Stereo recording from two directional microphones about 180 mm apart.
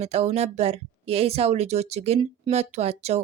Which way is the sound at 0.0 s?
35° right (ahead or behind).